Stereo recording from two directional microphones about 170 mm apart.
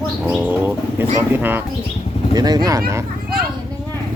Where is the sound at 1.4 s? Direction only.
10° right (ahead or behind).